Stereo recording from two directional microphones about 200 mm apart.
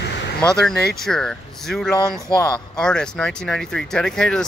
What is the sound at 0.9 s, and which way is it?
Speech, 5° left (ahead or behind).